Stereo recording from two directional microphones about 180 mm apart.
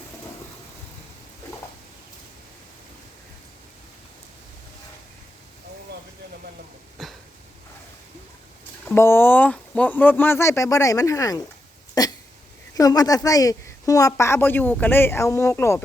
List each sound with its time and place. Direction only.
7.0 s a sound: centre (ahead or behind)
9.0 s speech: 15° left (ahead or behind)
12.0 s hiccup: 20° left (ahead or behind)
12.7 s speech: 20° left (ahead or behind)